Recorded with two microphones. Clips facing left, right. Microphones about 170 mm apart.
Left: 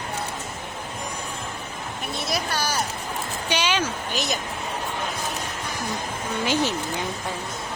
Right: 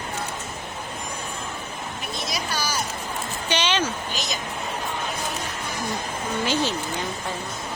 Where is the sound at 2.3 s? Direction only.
60° left (ahead or behind).